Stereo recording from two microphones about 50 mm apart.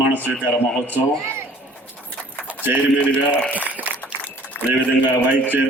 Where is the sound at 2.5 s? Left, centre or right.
Right.